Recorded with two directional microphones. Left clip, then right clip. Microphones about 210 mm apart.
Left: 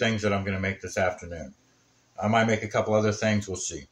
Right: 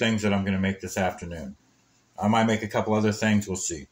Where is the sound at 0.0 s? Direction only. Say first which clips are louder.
Even; 15° right (ahead or behind).